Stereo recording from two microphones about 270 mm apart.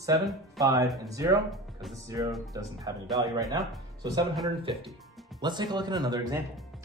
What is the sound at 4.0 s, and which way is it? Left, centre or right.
Speech, centre.